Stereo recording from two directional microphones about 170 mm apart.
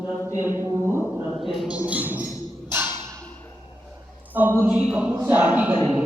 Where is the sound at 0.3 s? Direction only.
20° left (ahead or behind).